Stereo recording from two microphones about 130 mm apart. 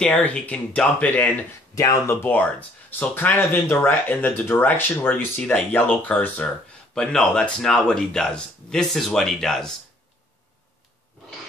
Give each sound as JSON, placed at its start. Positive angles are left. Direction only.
{"t": 0.0, "sound": "speech", "side_deg": 10}
{"t": 1.8, "sound": "a man's voice", "side_deg": 25}